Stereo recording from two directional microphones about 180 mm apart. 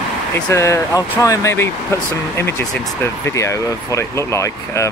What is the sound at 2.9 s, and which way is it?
Speech, 10° left (ahead or behind).